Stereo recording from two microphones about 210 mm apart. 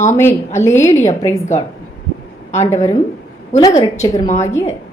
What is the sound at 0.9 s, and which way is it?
Speech, 30° left (ahead or behind).